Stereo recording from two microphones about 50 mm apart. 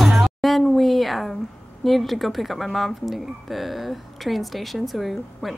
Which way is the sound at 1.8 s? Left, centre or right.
Centre.